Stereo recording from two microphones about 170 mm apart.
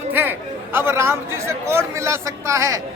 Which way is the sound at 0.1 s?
10° right (ahead or behind).